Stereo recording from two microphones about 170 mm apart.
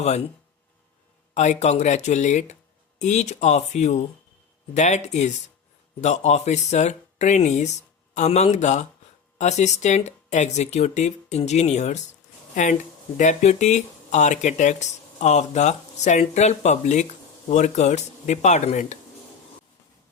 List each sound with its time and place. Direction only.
1.3 s speech: 45° left (ahead or behind)
13.1 s speech: 45° left (ahead or behind)